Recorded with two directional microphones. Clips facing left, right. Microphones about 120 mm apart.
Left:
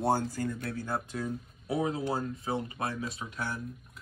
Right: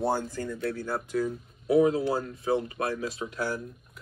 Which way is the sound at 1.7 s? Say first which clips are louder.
Right 8 dB; 25° left (ahead or behind).